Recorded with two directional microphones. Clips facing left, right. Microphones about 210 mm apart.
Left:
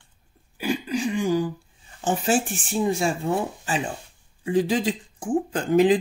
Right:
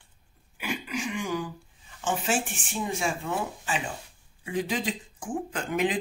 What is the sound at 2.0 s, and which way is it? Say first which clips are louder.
Speech: left 6 dB; 35° left (ahead or behind).